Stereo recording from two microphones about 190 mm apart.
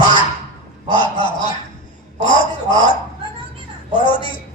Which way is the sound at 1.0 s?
25° left (ahead or behind).